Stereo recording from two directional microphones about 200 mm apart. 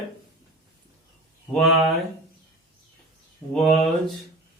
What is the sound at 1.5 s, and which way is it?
Speech, centre (ahead or behind).